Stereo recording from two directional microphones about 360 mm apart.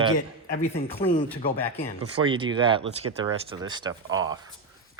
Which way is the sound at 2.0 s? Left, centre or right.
Centre.